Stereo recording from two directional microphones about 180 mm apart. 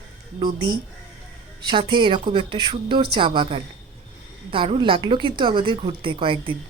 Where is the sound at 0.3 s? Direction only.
25° right (ahead or behind).